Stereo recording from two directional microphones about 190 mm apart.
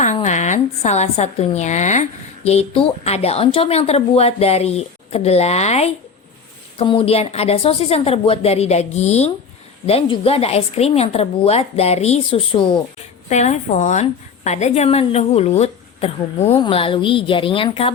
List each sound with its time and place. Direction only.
0.0 s a woman's voice: 40° left (ahead or behind)